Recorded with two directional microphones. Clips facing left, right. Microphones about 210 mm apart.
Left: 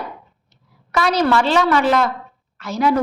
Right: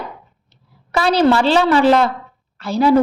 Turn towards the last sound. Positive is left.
turn(degrees=-30)  # may be behind; listen again after turning